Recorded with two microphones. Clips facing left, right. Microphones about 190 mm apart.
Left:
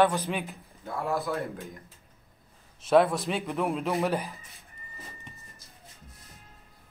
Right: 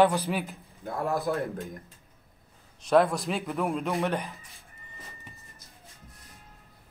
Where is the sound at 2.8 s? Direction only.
Centre (ahead or behind).